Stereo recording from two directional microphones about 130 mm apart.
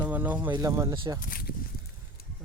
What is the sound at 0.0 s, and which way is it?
Speech, 10° right (ahead or behind).